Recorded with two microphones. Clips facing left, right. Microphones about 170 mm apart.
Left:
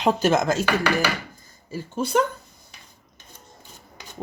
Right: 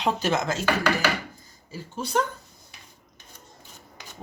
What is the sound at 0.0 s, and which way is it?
Speech, 50° left (ahead or behind).